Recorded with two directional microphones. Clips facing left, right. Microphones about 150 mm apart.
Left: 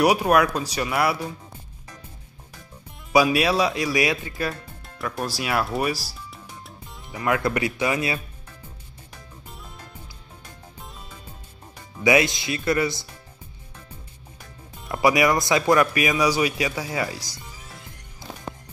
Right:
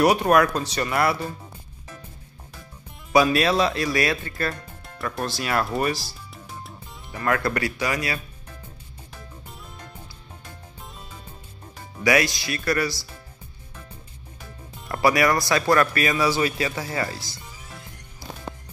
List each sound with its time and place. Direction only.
0.0 s a man's voice: 5° left (ahead or behind)
3.1 s a man's voice: 10° left (ahead or behind)
4.9 s a man's voice: 5° left (ahead or behind)
6.3 s music: centre (ahead or behind)
7.2 s speech: 15° left (ahead or behind)
12.0 s speech: 20° left (ahead or behind)
15.0 s a man's voice: 15° left (ahead or behind)